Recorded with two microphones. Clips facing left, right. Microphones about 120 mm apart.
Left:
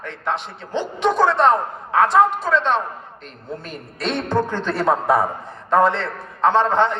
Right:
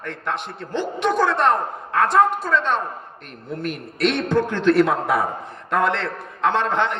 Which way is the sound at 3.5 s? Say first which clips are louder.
Right 4 dB; 65° right (ahead or behind).